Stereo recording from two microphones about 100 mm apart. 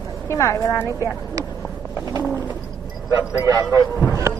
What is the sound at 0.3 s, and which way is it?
Speech, 30° left (ahead or behind).